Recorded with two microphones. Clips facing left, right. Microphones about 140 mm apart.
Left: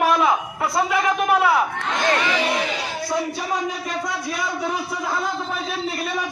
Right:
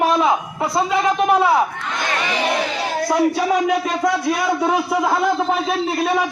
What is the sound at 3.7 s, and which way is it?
A man's voice, 80° right.